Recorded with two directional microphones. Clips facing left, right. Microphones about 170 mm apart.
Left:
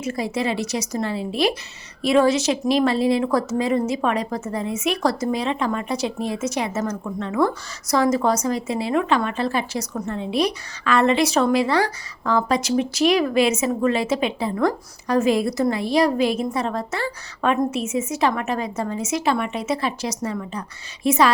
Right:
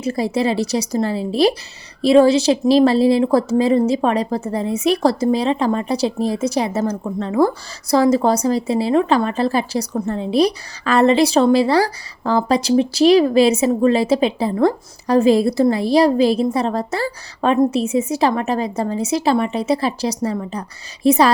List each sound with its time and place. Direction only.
0.0 s a woman's voice: 35° right (ahead or behind)